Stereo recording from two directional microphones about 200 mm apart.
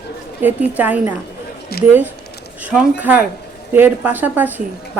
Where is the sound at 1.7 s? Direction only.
50° left (ahead or behind).